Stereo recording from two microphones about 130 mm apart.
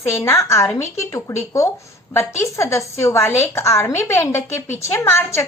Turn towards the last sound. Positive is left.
turn(degrees=20)  # may be behind; listen again after turning